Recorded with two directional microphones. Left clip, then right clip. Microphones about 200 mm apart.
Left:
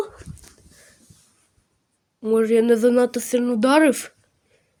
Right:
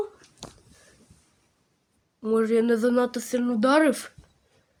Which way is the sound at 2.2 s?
15° left (ahead or behind).